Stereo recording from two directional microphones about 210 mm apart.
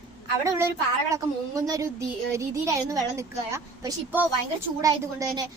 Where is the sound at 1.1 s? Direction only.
15° right (ahead or behind).